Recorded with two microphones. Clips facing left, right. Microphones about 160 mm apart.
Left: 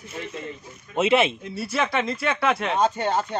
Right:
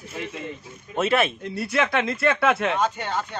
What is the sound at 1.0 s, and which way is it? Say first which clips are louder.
Speech: left 2 dB; 20° left (ahead or behind).